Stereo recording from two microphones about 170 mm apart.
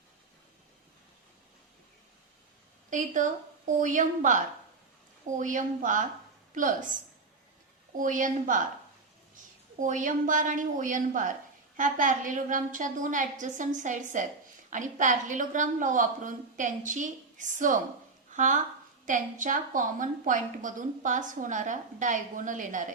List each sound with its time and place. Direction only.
2.9 s a woman's voice: 50° right (ahead or behind)
7.9 s a woman's voice: 50° right (ahead or behind)
9.8 s a woman's voice: 50° right (ahead or behind)